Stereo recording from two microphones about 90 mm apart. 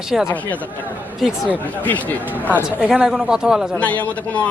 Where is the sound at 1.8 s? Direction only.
20° left (ahead or behind).